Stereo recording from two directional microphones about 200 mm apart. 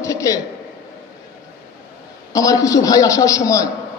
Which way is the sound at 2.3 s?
15° left (ahead or behind).